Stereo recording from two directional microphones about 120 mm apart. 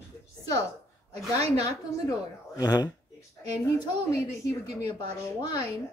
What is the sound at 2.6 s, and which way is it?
A woman's voice, 35° left (ahead or behind).